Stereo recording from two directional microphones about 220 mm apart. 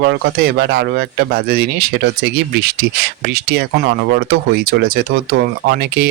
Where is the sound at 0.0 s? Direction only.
45° right (ahead or behind).